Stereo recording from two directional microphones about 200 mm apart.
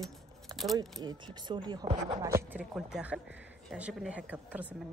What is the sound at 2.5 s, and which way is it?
A woman's voice, 5° right (ahead or behind).